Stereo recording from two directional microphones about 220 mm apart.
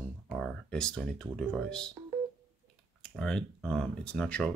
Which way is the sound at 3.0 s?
5° left (ahead or behind).